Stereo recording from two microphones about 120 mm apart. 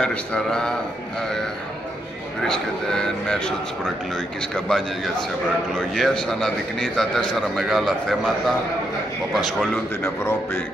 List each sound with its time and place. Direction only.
0.0 s speech: 10° left (ahead or behind)
2.4 s a man's voice: 5° left (ahead or behind)
4.6 s a man's voice: 5° left (ahead or behind)
5.9 s a man's voice: 5° left (ahead or behind)
10.0 s speech: 20° left (ahead or behind)